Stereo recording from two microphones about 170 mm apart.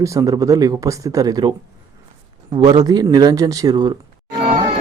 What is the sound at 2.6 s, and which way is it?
Speech, 25° right (ahead or behind).